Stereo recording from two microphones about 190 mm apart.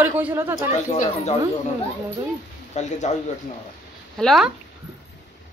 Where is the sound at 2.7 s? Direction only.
35° left (ahead or behind).